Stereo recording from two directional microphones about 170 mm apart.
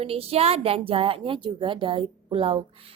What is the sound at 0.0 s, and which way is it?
A woman's voice, 35° right (ahead or behind).